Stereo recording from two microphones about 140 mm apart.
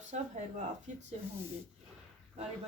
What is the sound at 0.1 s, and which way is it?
Speech, 60° right (ahead or behind).